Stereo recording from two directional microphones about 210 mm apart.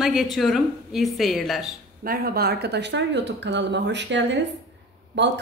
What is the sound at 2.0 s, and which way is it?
Speech, 45° right (ahead or behind).